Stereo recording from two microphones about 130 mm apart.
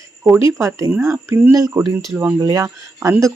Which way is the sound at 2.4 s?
25° right (ahead or behind).